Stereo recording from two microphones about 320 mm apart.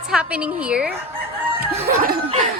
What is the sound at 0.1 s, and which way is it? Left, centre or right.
Speech, centre.